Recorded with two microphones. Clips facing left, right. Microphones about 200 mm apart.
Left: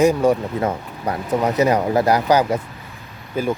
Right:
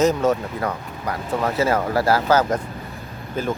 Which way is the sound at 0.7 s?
25° left (ahead or behind).